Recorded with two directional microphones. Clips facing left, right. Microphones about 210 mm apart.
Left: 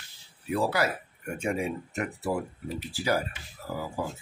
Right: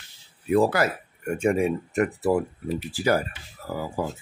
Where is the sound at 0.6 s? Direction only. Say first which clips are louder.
Right 6 dB; 50° right (ahead or behind).